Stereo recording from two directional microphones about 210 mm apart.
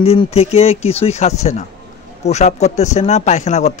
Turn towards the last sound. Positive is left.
turn(degrees=35)  # may be behind; listen again after turning